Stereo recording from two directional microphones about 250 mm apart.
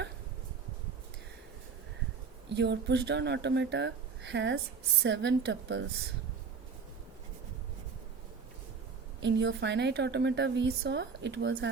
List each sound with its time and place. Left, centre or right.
2.6 s speech: right
9.2 s speech: right